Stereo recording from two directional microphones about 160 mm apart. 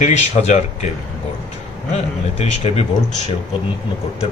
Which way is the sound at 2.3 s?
40° left (ahead or behind).